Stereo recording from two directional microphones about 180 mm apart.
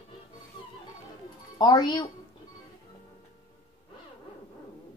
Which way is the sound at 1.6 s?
25° left (ahead or behind).